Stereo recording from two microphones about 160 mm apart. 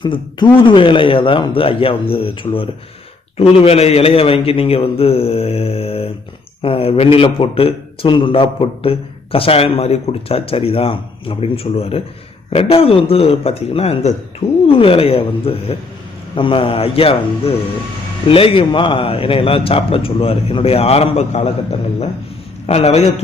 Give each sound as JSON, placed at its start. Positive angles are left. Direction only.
{"t": 0.0, "sound": "a man's voice", "side_deg": 30}